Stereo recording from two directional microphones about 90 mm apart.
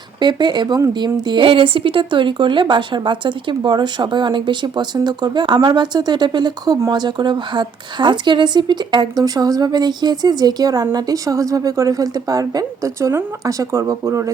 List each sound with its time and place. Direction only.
0.2 s speech: 55° right (ahead or behind); by 14.3 s 35° right (ahead or behind)